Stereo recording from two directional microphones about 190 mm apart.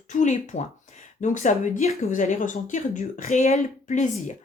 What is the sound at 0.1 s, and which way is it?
Speech, 40° left (ahead or behind).